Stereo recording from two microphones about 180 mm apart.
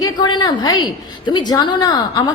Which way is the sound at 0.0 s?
25° left (ahead or behind).